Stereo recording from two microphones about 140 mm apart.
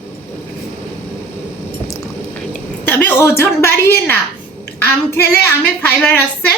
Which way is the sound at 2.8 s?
10° left (ahead or behind).